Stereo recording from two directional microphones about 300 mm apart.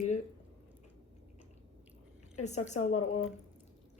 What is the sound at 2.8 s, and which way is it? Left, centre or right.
Speech, left.